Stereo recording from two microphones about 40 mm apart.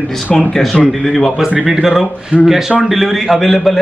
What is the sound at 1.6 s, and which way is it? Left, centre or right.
Speech, centre.